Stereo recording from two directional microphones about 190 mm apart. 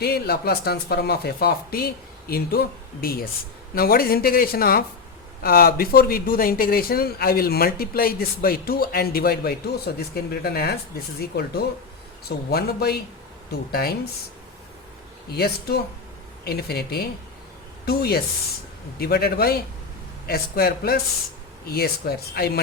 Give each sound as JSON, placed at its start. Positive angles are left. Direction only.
{"t": 0.0, "sound": "speech", "side_deg": 55}
{"t": 15.3, "sound": "speech", "side_deg": 55}